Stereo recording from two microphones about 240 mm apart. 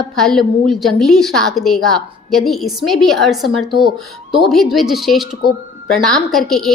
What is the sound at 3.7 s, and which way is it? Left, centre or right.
Speech, centre.